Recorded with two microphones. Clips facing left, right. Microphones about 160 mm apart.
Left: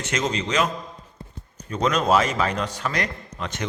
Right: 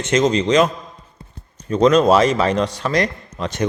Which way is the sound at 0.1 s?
30° right (ahead or behind).